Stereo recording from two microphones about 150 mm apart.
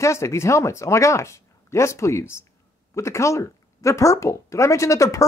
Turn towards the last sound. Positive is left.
turn(degrees=20)  # may be behind; listen again after turning